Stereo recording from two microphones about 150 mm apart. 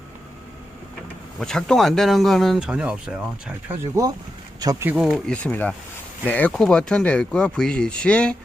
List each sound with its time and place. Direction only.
1.4 s speech: 5° left (ahead or behind)
4.6 s speech: 25° right (ahead or behind)
5.0 s speech: 5° left (ahead or behind)